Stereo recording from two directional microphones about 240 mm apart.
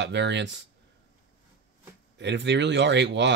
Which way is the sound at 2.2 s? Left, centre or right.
Right.